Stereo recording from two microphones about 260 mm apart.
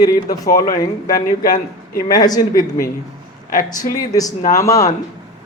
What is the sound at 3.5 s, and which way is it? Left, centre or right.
Speech, left.